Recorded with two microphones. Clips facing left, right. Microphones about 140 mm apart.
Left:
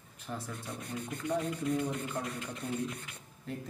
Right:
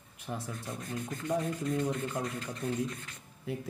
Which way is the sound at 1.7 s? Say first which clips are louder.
Even; 25° left (ahead or behind).